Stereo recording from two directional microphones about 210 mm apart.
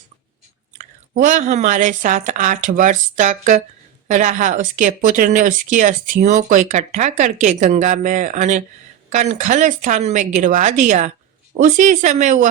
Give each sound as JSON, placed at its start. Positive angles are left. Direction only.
{"t": 0.8, "sound": "speech", "side_deg": -40}